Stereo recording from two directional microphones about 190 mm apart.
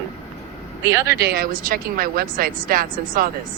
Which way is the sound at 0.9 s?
15° right (ahead or behind).